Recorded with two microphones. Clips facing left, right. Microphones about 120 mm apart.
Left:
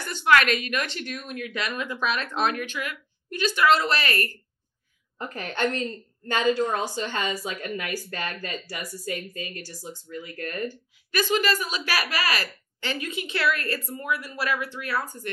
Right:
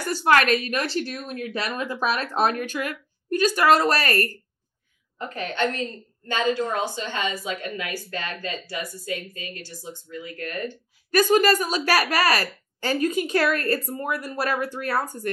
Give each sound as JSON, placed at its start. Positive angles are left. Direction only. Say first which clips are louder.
{"t": 0.0, "sound": "speech", "louder": "right 1 dB", "side_deg": -40}
{"t": 5.5, "sound": "speech", "louder": "even", "side_deg": 40}
{"t": 11.1, "sound": "speech", "louder": "right 6 dB", "side_deg": -45}